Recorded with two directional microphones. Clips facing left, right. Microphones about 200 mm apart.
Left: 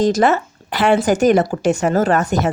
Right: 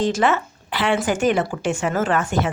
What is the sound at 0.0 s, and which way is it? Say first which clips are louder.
A woman's voice: left 5 dB; 40° left (ahead or behind).